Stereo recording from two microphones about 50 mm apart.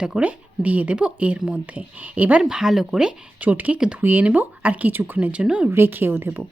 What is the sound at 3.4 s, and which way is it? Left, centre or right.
Speech, right.